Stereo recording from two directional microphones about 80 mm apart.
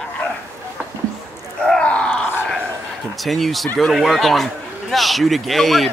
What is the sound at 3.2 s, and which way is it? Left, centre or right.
Speech, centre.